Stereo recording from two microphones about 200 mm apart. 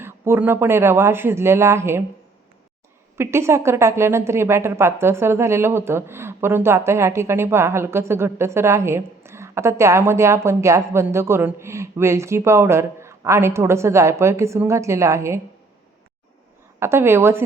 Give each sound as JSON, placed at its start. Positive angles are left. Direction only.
{"t": 0.0, "sound": "a woman's voice", "side_deg": -10}
{"t": 3.2, "sound": "a woman's voice", "side_deg": -15}
{"t": 16.8, "sound": "a woman's voice", "side_deg": -10}